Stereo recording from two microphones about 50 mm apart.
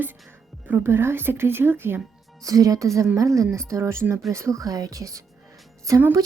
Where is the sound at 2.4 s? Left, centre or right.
Right.